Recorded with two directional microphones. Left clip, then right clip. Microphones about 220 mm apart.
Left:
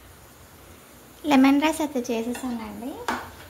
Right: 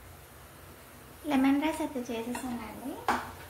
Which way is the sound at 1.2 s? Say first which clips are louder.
Left 9 dB; 50° left (ahead or behind).